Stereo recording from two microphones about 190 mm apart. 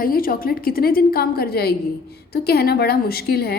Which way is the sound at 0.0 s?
50° left (ahead or behind).